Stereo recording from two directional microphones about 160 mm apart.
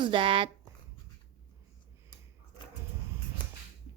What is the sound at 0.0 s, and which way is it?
Speech, 30° right (ahead or behind).